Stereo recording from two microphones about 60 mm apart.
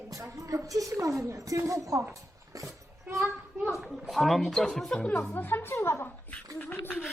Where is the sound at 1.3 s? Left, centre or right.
Right.